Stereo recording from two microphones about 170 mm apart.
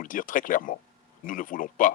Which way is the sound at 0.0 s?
50° left (ahead or behind).